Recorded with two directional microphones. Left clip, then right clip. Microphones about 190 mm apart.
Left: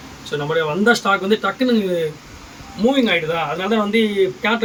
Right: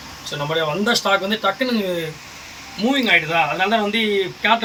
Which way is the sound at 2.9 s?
5° left (ahead or behind).